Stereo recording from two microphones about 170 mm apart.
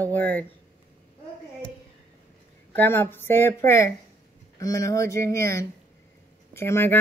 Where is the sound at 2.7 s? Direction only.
10° left (ahead or behind).